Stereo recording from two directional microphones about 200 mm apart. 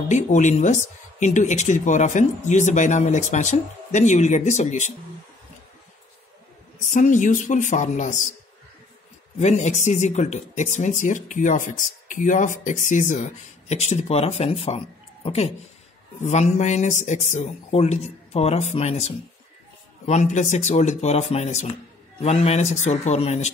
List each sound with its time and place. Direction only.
0.1 s speech: 35° left (ahead or behind)
6.9 s speech: 40° left (ahead or behind)
9.4 s speech: 35° left (ahead or behind)